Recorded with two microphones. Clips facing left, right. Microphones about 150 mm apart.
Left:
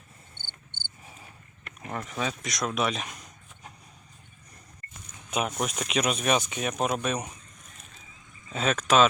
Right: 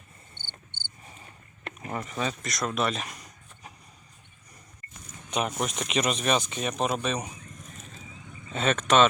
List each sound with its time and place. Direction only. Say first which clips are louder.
0.3 s cricket: right 1 dB; 50° left (ahead or behind)
1.0 s cricket: even; 5° left (ahead or behind)
1.8 s speech: right 1 dB; centre (ahead or behind)
5.3 s speech: even; centre (ahead or behind)
8.5 s speech: even; centre (ahead or behind)